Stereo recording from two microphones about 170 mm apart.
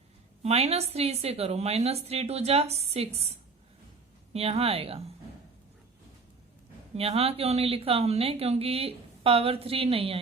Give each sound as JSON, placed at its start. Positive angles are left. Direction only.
{"t": 0.4, "sound": "speech", "side_deg": -40}
{"t": 6.9, "sound": "speech", "side_deg": -35}